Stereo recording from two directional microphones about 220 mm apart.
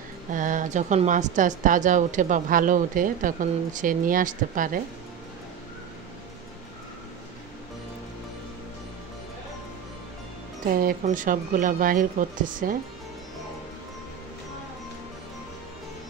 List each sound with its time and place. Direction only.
0.3 s a woman's voice: 35° right (ahead or behind)
10.7 s a woman's voice: 40° right (ahead or behind)